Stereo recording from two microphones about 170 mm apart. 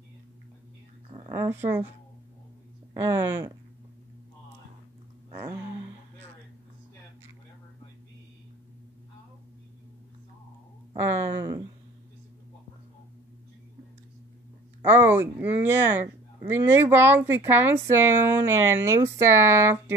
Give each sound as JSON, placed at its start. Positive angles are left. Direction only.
{"t": 1.3, "sound": "speech", "side_deg": -15}
{"t": 2.9, "sound": "speech", "side_deg": -15}
{"t": 11.0, "sound": "speech", "side_deg": -20}
{"t": 14.8, "sound": "speech", "side_deg": -15}